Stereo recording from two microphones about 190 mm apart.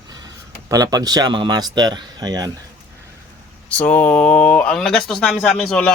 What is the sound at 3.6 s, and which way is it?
A man's voice, 10° left (ahead or behind).